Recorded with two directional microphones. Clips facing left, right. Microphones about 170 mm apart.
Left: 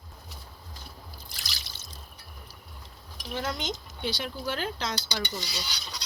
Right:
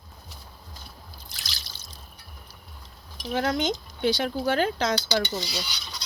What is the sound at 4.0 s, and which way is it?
Speech, 50° right (ahead or behind).